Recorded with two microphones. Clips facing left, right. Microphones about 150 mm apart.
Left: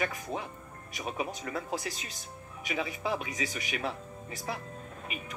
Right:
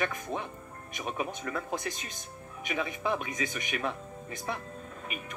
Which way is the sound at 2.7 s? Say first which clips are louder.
Right 1 dB; 45° right (ahead or behind).